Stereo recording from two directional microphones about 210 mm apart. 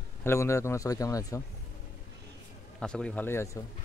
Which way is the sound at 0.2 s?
10° left (ahead or behind).